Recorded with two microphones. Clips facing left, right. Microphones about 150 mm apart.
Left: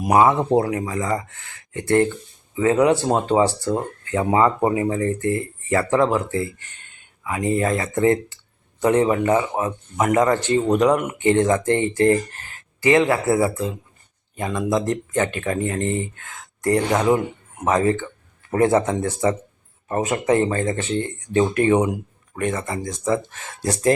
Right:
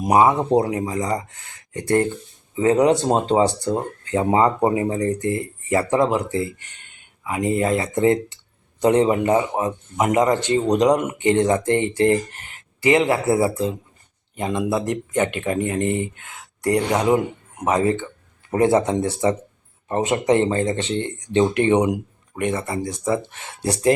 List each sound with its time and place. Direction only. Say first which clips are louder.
0.0 s a man's voice: even; 20° right (ahead or behind)
2.6 s a man's voice: right 1 dB; 25° right (ahead or behind)